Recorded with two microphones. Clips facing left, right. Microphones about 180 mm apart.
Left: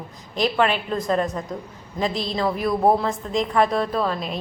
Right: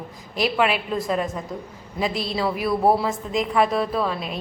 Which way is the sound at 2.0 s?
5° right (ahead or behind).